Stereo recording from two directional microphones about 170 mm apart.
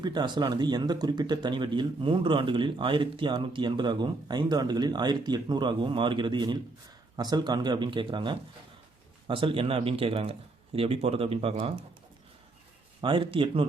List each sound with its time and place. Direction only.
0.0 s speech: 25° right (ahead or behind)
13.0 s speech: 30° right (ahead or behind)